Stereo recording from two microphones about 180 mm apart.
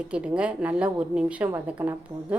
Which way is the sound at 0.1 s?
5° right (ahead or behind).